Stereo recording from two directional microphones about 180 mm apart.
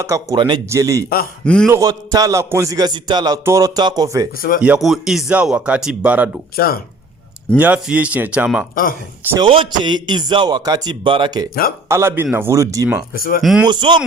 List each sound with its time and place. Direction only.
0.0 s a man's voice: 15° right (ahead or behind)
4.4 s speech: 50° left (ahead or behind)
4.6 s speech: 5° right (ahead or behind)
6.6 s speech: 55° left (ahead or behind)
7.6 s speech: 10° right (ahead or behind)
8.7 s speech: 50° left (ahead or behind)
9.4 s a man's voice: 25° right (ahead or behind)
11.9 s speech: 15° right (ahead or behind)
13.1 s speech: 55° left (ahead or behind)
13.4 s speech: centre (ahead or behind)
13.7 s a man's voice: 25° right (ahead or behind)